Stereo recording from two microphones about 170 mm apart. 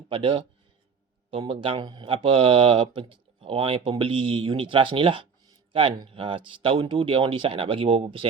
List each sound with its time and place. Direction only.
0.1 s speech: 30° right (ahead or behind)